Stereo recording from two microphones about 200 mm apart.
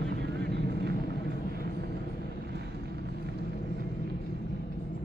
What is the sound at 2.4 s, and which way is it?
Vehicle, 55° right (ahead or behind).